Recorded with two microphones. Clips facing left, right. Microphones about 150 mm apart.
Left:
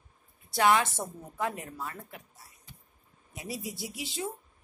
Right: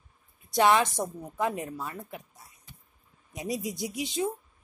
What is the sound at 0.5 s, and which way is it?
A woman's voice, 20° right (ahead or behind).